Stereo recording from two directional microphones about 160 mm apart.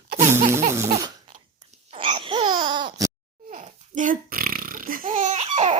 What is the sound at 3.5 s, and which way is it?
Burping, 55° right (ahead or behind).